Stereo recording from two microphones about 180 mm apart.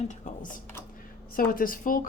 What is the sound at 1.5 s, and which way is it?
Speech, 50° left (ahead or behind).